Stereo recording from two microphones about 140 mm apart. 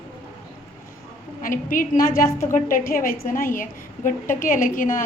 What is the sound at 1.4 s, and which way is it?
Speech, 75° left (ahead or behind).